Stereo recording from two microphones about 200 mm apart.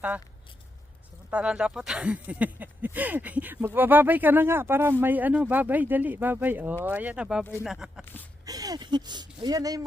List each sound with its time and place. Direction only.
1.3 s speech: 5° right (ahead or behind)
8.0 s a sound: 10° left (ahead or behind)
8.4 s speech: 20° right (ahead or behind)